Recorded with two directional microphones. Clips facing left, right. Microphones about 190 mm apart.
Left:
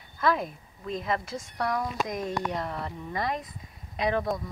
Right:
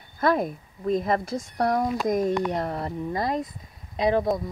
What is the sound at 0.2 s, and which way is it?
Speech, 45° right (ahead or behind).